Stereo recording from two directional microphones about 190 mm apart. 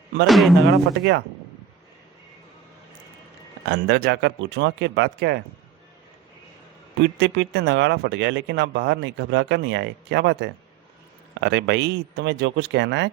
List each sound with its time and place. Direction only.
0.3 s speech: centre (ahead or behind)
0.7 s speech: 60° right (ahead or behind)
3.7 s speech: 65° right (ahead or behind)
7.0 s speech: 65° right (ahead or behind)